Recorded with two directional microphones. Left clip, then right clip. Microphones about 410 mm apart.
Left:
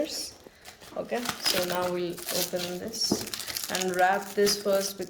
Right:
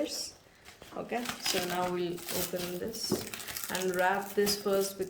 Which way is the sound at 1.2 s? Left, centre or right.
Centre.